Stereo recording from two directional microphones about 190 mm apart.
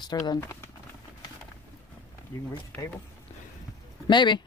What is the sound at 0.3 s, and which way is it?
Speech, 15° left (ahead or behind).